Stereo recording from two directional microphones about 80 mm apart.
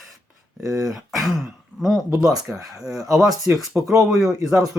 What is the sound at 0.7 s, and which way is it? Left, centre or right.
Speech, centre.